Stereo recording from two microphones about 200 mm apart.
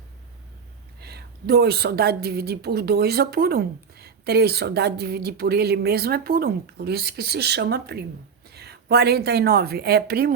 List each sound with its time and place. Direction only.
0.9 s a woman's voice: 50° right (ahead or behind)